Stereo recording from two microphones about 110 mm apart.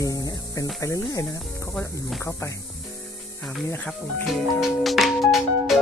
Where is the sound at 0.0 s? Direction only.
35° left (ahead or behind).